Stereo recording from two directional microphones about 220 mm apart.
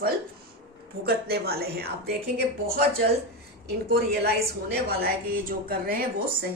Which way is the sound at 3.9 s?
45° right (ahead or behind).